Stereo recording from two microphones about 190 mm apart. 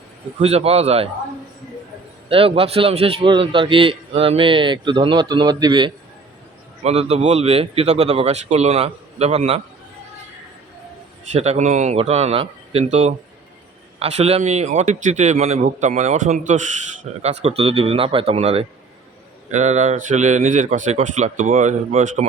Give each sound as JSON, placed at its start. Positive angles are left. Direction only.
{"t": 0.3, "sound": "speech", "side_deg": -35}
{"t": 2.3, "sound": "a man's voice", "side_deg": -30}
{"t": 6.8, "sound": "speech", "side_deg": -35}
{"t": 11.3, "sound": "speech", "side_deg": -35}